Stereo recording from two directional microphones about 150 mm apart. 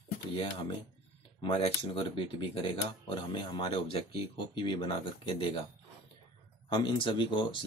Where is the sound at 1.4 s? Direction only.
35° left (ahead or behind).